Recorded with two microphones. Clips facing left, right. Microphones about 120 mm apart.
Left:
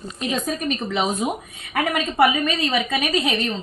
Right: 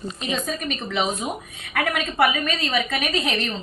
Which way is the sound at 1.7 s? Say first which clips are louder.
Left 3 dB; 15° left (ahead or behind).